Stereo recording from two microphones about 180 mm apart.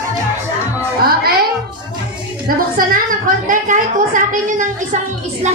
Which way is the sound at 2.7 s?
50° right (ahead or behind).